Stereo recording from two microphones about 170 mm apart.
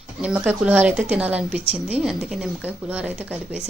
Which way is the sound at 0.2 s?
5° right (ahead or behind).